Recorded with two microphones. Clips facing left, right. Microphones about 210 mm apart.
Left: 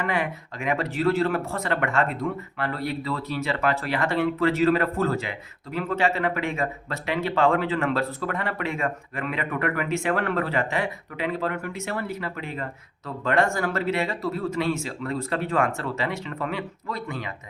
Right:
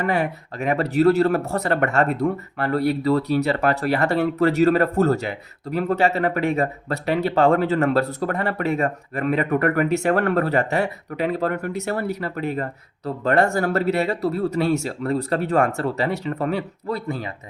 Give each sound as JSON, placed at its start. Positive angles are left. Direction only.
{"t": 0.0, "sound": "speech", "side_deg": -40}